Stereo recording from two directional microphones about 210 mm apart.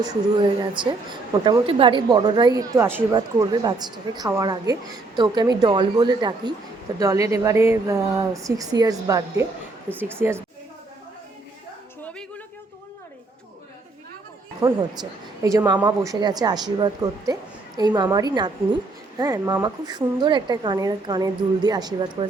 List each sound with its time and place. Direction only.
0.6 s a woman's voice: 20° right (ahead or behind)
14.6 s a woman's voice: 25° right (ahead or behind)